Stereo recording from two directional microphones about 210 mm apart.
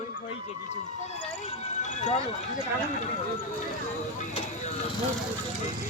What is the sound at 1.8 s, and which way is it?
Speech, 35° left (ahead or behind).